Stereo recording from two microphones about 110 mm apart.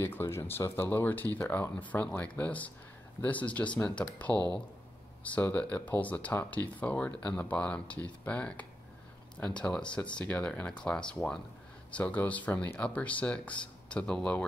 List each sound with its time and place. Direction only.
0.0 s speech: 20° left (ahead or behind)